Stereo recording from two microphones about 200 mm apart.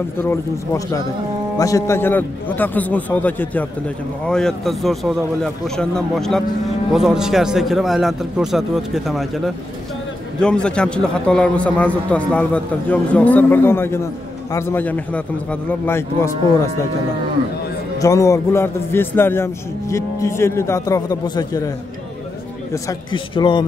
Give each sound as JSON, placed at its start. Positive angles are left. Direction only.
{"t": 0.2, "sound": "a man's voice", "side_deg": 15}
{"t": 10.4, "sound": "a man's voice", "side_deg": 5}
{"t": 18.0, "sound": "a man's voice", "side_deg": 15}
{"t": 22.8, "sound": "a man's voice", "side_deg": 25}